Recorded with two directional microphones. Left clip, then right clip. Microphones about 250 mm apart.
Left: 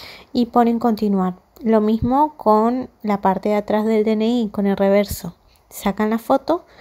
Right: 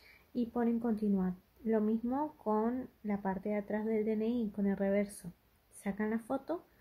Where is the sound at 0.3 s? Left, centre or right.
Left.